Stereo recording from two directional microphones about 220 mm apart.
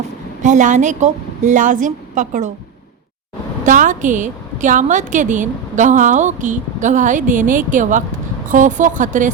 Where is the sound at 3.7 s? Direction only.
35° right (ahead or behind).